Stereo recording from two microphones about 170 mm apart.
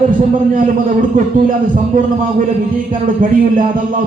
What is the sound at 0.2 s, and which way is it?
Speech, 50° right (ahead or behind).